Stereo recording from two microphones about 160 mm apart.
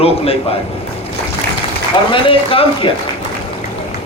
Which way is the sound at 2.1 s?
35° left (ahead or behind).